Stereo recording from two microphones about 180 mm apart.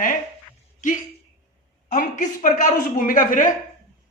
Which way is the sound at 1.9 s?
45° left (ahead or behind).